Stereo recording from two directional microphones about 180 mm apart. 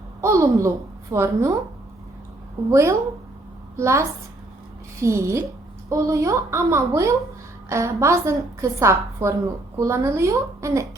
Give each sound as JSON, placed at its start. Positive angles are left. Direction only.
{"t": 0.2, "sound": "a woman's voice", "side_deg": -15}
{"t": 2.6, "sound": "a woman's voice", "side_deg": -15}